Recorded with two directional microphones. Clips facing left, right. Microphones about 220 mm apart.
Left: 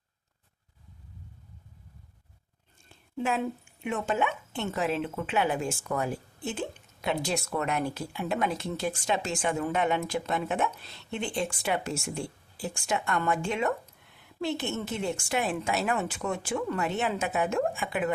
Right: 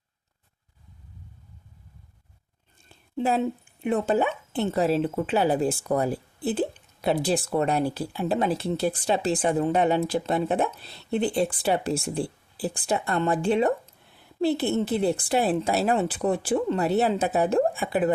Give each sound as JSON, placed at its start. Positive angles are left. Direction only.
{"t": 3.2, "sound": "speech", "side_deg": -30}